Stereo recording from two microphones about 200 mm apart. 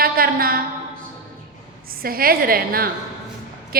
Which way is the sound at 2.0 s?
45° right (ahead or behind).